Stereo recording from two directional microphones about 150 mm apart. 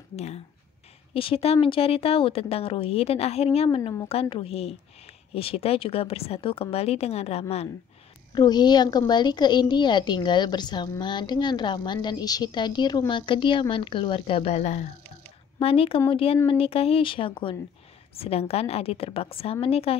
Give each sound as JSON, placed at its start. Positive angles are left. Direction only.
{"t": 0.1, "sound": "speech", "side_deg": 45}
{"t": 8.4, "sound": "a woman's voice", "side_deg": 30}
{"t": 15.6, "sound": "speech", "side_deg": 40}